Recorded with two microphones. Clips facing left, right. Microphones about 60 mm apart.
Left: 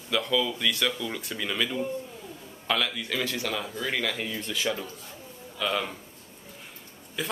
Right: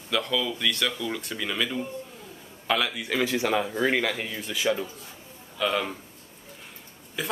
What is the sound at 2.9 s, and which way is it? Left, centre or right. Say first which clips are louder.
Speech: right 4 dB; centre.